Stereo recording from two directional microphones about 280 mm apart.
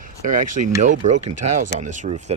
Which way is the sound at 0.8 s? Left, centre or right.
Right.